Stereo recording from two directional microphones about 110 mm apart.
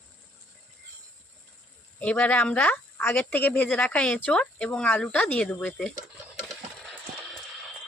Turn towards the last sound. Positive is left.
turn(degrees=-5)  # may be behind; listen again after turning